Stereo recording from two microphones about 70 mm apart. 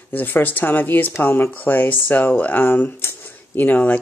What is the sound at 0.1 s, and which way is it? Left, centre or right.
Speech, left.